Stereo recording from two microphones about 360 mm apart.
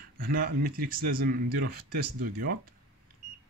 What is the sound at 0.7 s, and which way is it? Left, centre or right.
Speech, right.